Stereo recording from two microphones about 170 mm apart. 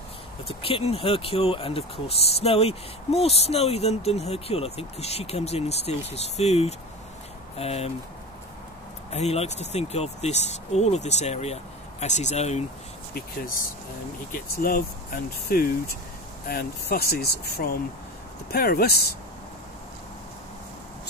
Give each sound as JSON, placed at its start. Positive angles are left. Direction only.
{"t": 0.5, "sound": "speech", "side_deg": 35}
{"t": 9.1, "sound": "speech", "side_deg": 40}
{"t": 13.1, "sound": "speech", "side_deg": 55}